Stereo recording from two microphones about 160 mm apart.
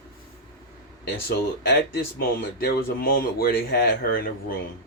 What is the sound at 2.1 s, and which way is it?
Speech, 70° left (ahead or behind).